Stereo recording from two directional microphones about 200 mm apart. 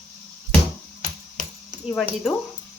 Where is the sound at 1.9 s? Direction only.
Centre (ahead or behind).